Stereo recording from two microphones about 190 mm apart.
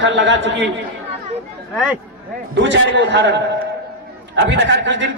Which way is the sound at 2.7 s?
70° right (ahead or behind).